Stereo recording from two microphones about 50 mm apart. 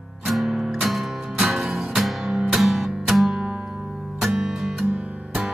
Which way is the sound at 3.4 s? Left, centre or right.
Centre.